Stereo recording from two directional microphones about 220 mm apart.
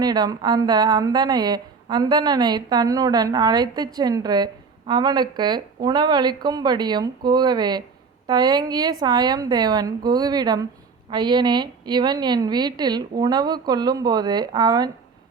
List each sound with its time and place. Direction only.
0.0 s a woman's voice: 20° right (ahead or behind)